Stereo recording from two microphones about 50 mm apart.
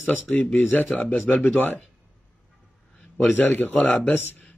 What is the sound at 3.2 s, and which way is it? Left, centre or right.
Speech, left.